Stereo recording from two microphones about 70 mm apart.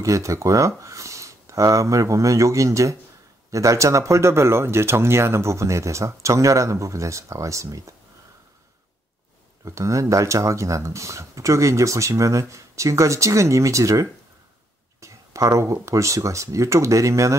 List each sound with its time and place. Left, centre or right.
0.0 s speech: right
9.7 s speech: right